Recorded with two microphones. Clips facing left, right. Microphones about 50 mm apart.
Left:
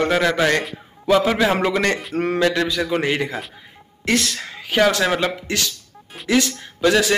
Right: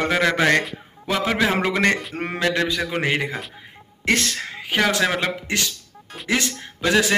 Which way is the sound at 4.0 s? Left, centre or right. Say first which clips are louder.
Left 1 dB; right.